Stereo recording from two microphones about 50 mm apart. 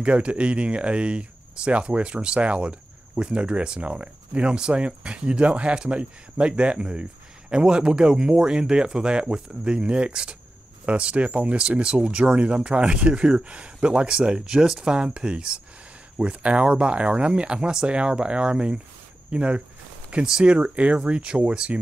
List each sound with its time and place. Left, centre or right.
0.0 s speech: right